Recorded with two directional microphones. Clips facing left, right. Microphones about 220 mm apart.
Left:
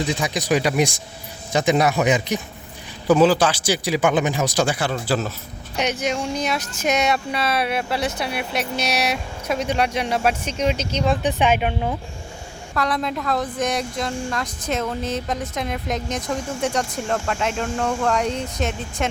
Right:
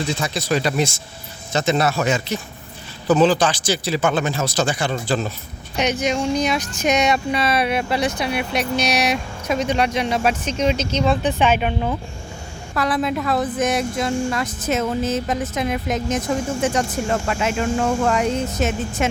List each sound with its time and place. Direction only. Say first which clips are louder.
0.0 s speech: left 1 dB; 15° left (ahead or behind)
12.7 s speech: right 3 dB; 5° right (ahead or behind)